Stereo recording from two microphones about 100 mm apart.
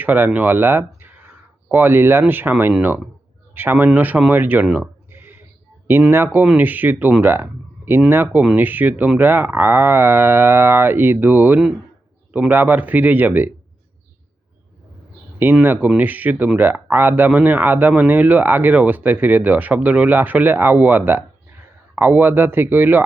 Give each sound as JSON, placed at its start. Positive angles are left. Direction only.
{"t": 0.0, "sound": "speech", "side_deg": -20}
{"t": 15.6, "sound": "speech", "side_deg": -15}